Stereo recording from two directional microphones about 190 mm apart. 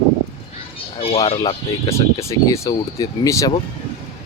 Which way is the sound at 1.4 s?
15° left (ahead or behind).